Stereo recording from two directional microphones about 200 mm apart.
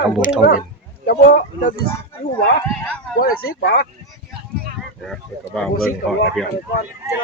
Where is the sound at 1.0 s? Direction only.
55° left (ahead or behind).